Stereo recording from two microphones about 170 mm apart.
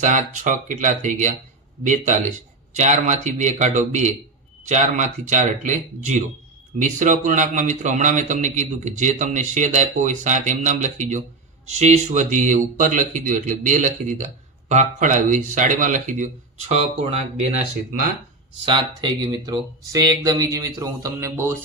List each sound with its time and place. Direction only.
0.0 s a man's voice: 45° right (ahead or behind)
18.6 s speech: 30° right (ahead or behind)